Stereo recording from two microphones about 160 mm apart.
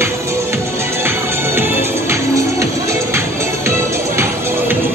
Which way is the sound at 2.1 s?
20° right (ahead or behind).